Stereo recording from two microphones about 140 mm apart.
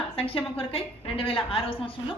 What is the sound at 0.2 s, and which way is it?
A woman's voice, 45° left (ahead or behind).